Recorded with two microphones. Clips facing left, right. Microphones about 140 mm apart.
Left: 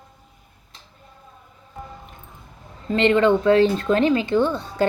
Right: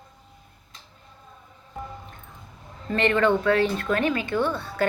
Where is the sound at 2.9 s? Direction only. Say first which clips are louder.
Left 4 dB; 20° left (ahead or behind).